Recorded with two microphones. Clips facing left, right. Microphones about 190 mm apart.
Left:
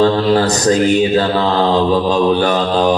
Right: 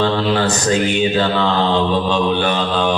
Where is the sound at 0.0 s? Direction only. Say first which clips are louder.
Left 4 dB; 40° left (ahead or behind).